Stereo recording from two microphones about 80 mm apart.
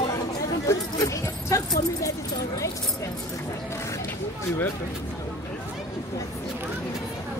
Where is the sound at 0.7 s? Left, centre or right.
Left.